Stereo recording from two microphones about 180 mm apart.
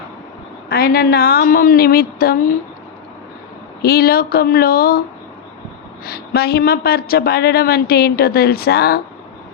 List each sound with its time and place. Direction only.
0.7 s a woman's voice: 55° left (ahead or behind)
3.8 s a woman's voice: 60° left (ahead or behind)
6.1 s a woman's voice: 60° left (ahead or behind)